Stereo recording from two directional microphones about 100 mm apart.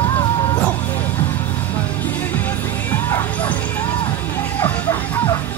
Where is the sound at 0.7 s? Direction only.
20° left (ahead or behind).